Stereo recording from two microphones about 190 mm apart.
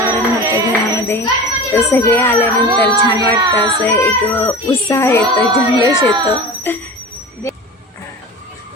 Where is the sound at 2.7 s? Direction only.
20° right (ahead or behind).